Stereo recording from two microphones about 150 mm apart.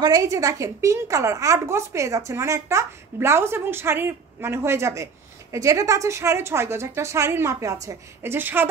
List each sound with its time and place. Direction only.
0.0 s a woman's voice: 25° right (ahead or behind)